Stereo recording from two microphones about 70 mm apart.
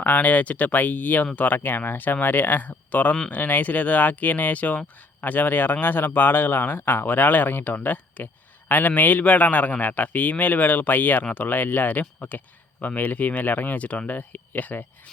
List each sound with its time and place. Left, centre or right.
0.0 s speech: left